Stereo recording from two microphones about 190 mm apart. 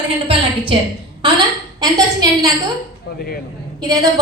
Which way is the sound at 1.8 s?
20° right (ahead or behind).